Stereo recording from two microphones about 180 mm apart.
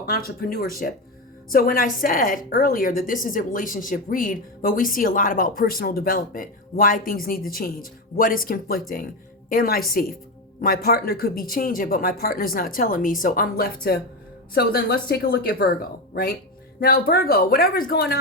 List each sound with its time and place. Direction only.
0.0 s a woman's voice: 55° left (ahead or behind)